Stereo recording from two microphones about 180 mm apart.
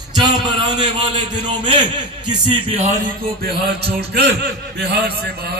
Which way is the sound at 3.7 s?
65° right (ahead or behind).